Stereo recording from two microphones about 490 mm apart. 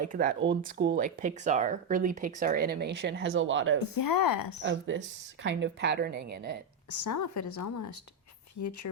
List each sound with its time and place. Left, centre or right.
0.0 s speech: centre
3.8 s speech: left
4.6 s speech: right
6.9 s a woman's voice: left